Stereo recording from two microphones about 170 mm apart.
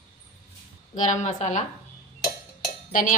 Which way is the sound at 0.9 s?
45° left (ahead or behind).